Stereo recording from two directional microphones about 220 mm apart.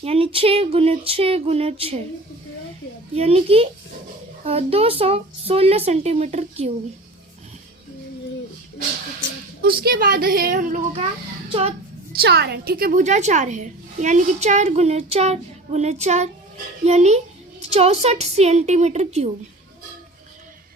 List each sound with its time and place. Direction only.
0.0 s speech: 25° right (ahead or behind)
3.2 s speech: 30° right (ahead or behind)
9.6 s a woman's voice: 45° right (ahead or behind)
11.4 s speech: 25° right (ahead or behind)
12.2 s a woman's voice: 45° right (ahead or behind); by 19.3 s 30° right (ahead or behind)